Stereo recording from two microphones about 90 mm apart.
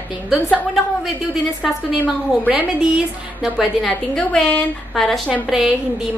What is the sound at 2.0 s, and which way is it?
Speech, 20° right (ahead or behind).